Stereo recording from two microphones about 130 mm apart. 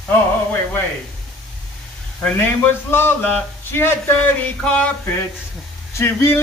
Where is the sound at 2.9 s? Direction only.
15° left (ahead or behind).